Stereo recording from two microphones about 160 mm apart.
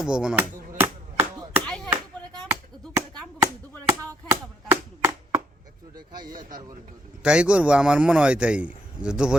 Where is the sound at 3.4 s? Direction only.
20° right (ahead or behind).